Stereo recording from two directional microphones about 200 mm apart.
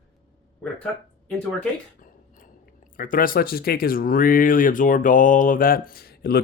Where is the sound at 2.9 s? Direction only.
45° left (ahead or behind).